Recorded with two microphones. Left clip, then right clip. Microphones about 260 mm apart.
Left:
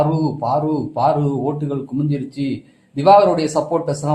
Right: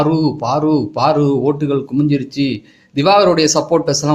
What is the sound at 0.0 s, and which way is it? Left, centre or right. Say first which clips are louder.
A man's voice: right 3 dB; right.